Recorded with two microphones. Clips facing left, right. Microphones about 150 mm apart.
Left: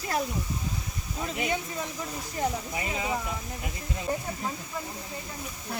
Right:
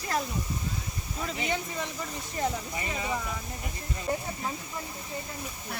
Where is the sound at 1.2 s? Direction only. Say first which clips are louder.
Left 1 dB; 5° left (ahead or behind).